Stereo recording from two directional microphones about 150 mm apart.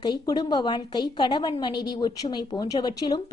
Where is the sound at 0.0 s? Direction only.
30° left (ahead or behind).